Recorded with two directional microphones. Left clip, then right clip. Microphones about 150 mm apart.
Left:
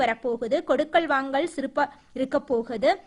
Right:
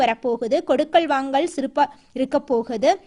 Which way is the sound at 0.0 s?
35° right (ahead or behind).